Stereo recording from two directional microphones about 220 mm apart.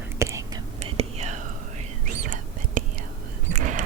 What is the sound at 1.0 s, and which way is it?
Whispering, 30° right (ahead or behind).